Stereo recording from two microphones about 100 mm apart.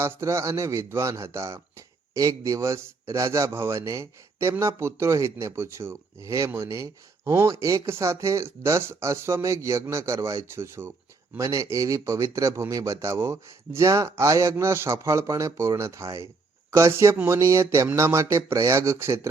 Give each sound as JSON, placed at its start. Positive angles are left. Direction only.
{"t": 0.0, "sound": "speech", "side_deg": -25}